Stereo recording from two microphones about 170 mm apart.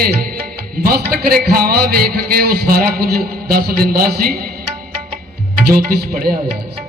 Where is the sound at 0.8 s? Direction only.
65° right (ahead or behind).